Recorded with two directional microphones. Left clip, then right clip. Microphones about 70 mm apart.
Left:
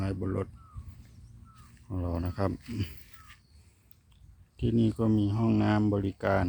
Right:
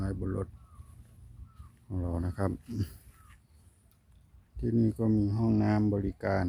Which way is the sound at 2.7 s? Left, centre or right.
Right.